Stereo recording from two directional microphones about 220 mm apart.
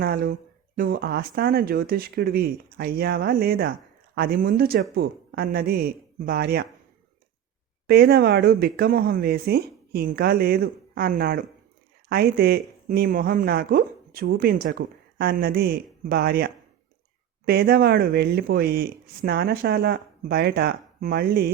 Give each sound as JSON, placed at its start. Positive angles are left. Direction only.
{"t": 0.0, "sound": "speech", "side_deg": -45}
{"t": 7.9, "sound": "speech", "side_deg": -45}